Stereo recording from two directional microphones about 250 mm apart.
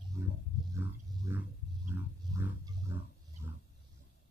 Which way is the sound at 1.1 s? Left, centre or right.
Centre.